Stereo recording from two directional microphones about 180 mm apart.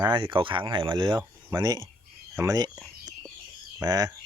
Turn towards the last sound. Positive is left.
turn(degrees=-20)  # may be behind; listen again after turning